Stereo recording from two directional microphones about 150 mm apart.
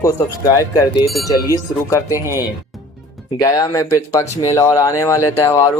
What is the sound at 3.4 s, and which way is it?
Speech, 25° left (ahead or behind).